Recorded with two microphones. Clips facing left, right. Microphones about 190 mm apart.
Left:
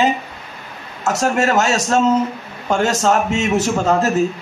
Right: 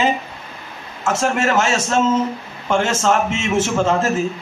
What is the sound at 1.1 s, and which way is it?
A man's voice, 40° left (ahead or behind).